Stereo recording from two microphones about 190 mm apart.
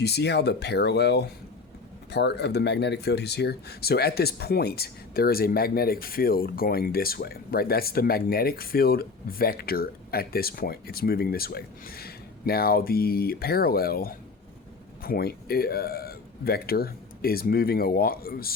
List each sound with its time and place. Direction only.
0.0 s speech: 60° left (ahead or behind)